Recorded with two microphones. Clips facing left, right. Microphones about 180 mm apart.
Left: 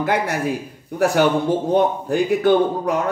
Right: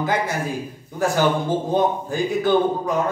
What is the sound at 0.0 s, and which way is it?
Speech, 65° left (ahead or behind).